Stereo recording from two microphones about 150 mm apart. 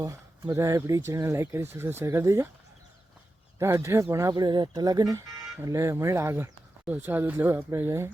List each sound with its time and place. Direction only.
0.0 s speech: 20° right (ahead or behind)
3.6 s speech: 20° right (ahead or behind)